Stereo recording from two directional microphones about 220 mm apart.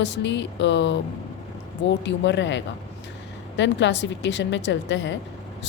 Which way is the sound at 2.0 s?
55° left (ahead or behind).